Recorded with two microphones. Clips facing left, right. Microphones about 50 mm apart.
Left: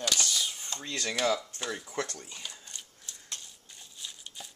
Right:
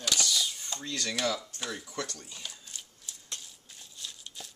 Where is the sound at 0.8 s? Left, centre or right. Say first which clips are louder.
Left 1 dB; left.